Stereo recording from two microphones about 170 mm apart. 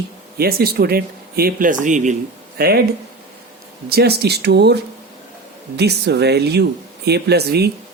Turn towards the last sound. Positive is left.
turn(degrees=-70)  # may be behind; listen again after turning